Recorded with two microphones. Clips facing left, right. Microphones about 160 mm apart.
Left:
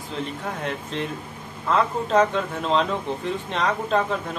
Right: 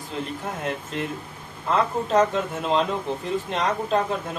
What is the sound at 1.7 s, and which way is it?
A man's voice, centre (ahead or behind).